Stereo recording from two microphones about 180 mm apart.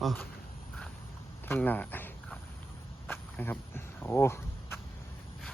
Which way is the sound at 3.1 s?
10° left (ahead or behind).